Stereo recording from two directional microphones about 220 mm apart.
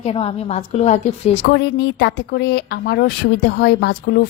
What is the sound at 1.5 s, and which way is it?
A woman's voice, 55° left (ahead or behind).